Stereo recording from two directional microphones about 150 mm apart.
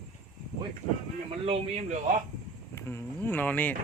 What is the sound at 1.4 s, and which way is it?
Speech, 45° right (ahead or behind).